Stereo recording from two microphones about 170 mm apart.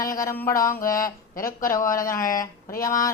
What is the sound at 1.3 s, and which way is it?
Speech, 55° left (ahead or behind).